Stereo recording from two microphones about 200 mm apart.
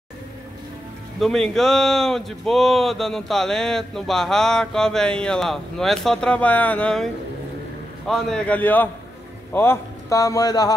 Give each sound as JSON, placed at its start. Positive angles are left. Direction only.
{"t": 1.2, "sound": "speech", "side_deg": 0}
{"t": 8.1, "sound": "a man's voice", "side_deg": 5}